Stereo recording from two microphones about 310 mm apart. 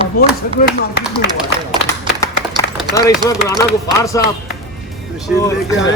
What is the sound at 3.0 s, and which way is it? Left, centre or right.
Speech, centre.